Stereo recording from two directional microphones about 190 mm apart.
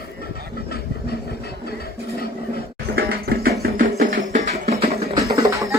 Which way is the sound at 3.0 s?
55° right (ahead or behind).